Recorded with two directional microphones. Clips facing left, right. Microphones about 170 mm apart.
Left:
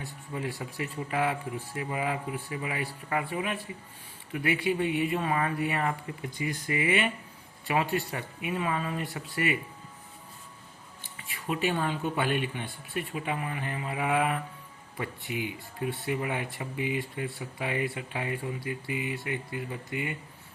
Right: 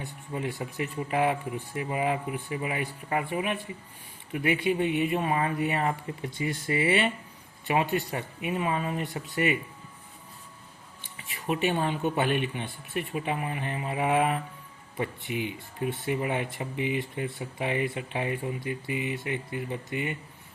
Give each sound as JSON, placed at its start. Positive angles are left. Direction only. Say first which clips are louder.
{"t": 0.0, "sound": "speech", "louder": "right 2 dB", "side_deg": -20}
{"t": 7.7, "sound": "speech", "louder": "right 2 dB", "side_deg": -20}
{"t": 11.0, "sound": "speech", "louder": "right 3 dB", "side_deg": -20}